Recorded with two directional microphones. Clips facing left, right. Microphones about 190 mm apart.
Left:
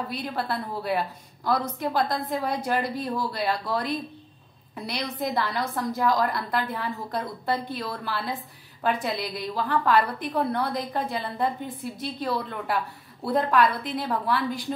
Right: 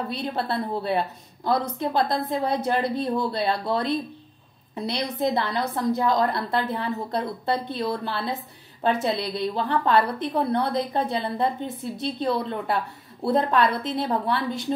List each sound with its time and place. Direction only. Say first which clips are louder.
0.1 s a woman's voice: right 2 dB; 25° right (ahead or behind)